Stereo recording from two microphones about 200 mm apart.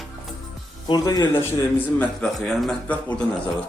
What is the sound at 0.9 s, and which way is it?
Speech, 20° left (ahead or behind).